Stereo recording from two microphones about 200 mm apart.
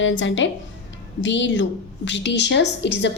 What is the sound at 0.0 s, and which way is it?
A woman's voice, 70° left (ahead or behind).